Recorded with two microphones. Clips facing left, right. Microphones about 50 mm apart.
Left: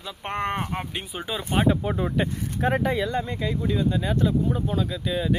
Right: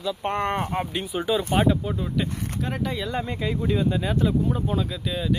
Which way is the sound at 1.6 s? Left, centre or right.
Left.